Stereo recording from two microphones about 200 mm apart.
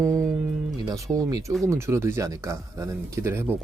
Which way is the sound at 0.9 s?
15° right (ahead or behind).